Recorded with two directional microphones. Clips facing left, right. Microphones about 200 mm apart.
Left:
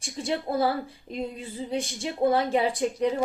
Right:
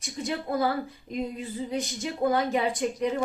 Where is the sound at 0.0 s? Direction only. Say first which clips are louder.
Left 2 dB; 30° left (ahead or behind).